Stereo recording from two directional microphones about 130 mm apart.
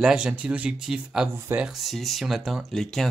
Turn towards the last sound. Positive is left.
turn(degrees=5)  # may be behind; listen again after turning